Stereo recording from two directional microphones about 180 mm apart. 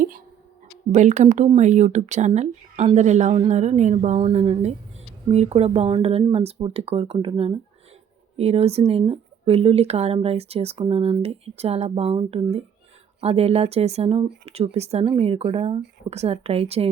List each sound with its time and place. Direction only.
0.9 s speech: 40° right (ahead or behind)